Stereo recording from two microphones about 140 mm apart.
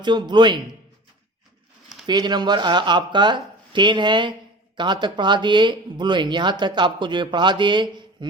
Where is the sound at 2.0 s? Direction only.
30° right (ahead or behind).